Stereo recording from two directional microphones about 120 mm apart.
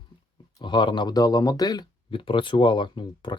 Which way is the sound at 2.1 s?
45° left (ahead or behind).